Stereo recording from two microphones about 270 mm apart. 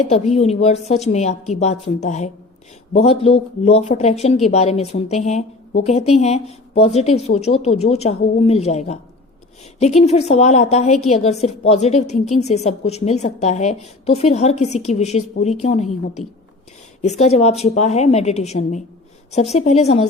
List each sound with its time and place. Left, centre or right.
0.1 s a woman's voice: left